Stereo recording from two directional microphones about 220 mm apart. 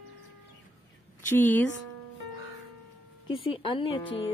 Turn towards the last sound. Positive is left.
turn(degrees=25)  # may be behind; listen again after turning